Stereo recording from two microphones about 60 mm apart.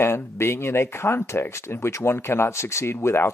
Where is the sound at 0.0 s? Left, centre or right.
Left.